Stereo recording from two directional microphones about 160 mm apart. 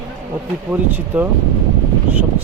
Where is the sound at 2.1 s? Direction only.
10° right (ahead or behind).